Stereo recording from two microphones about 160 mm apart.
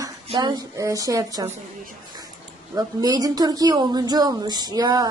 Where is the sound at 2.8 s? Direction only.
25° right (ahead or behind).